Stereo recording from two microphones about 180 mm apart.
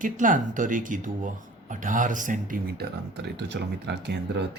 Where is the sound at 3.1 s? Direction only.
70° right (ahead or behind).